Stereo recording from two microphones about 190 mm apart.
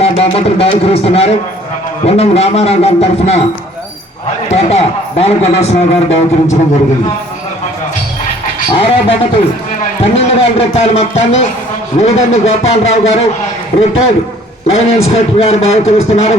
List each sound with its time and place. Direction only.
0.0 s a man's voice: 30° left (ahead or behind)
4.4 s a man's voice: 35° left (ahead or behind)
8.7 s speech: 30° left (ahead or behind)
10.2 s a man's voice: 30° left (ahead or behind)
14.7 s a man's voice: 35° left (ahead or behind)